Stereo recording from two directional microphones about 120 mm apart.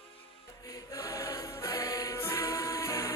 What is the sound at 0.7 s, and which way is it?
Music, 25° left (ahead or behind).